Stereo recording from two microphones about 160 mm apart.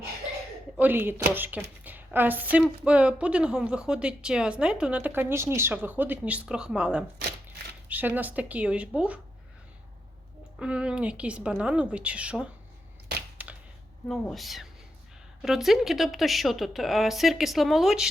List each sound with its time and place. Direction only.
0.8 s a woman's voice: 10° right (ahead or behind)
10.6 s a woman's voice: 5° right (ahead or behind)
13.4 s a sound: 10° right (ahead or behind)
14.1 s speech: centre (ahead or behind)